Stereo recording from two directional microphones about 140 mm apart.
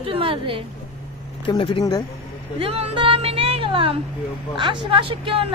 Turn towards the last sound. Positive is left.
turn(degrees=-40)  # may be behind; listen again after turning